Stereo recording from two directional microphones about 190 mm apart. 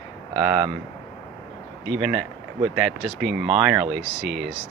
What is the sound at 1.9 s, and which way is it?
Speech, 5° right (ahead or behind).